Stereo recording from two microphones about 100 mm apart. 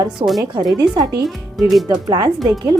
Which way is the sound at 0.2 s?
45° right (ahead or behind).